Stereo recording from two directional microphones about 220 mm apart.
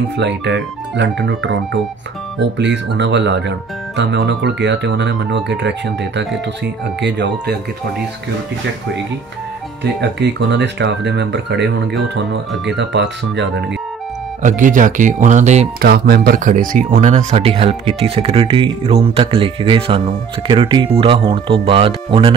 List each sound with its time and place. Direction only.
0.5 s speech: 55° right (ahead or behind)
9.9 s speech: 50° right (ahead or behind)
14.4 s speech: 35° right (ahead or behind)
15.8 s speech: 45° right (ahead or behind); by 22.3 s 25° right (ahead or behind)